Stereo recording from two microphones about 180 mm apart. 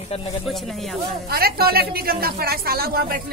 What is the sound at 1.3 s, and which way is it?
A woman's voice, 60° right (ahead or behind).